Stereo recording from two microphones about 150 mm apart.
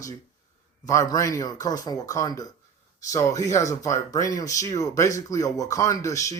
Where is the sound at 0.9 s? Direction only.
25° left (ahead or behind).